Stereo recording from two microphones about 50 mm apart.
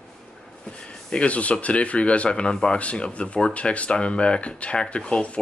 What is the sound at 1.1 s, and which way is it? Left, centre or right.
Speech, left.